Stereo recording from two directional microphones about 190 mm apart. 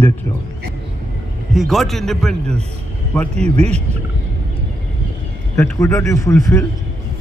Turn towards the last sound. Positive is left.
turn(degrees=15)  # may be behind; listen again after turning